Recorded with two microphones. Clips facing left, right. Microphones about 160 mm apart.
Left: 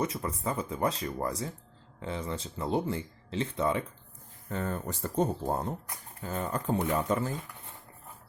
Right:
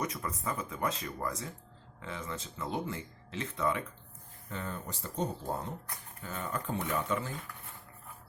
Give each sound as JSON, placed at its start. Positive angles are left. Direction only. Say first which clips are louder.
{"t": 0.0, "sound": "speech", "louder": "left 4 dB", "side_deg": 30}
{"t": 4.4, "sound": "speech", "louder": "left 6 dB", "side_deg": 45}